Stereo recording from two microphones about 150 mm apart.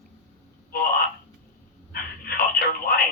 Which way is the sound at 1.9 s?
85° left.